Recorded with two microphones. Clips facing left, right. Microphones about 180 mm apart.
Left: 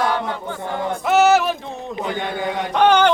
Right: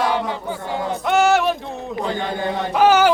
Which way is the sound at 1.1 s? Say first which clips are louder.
Left 2 dB; centre (ahead or behind).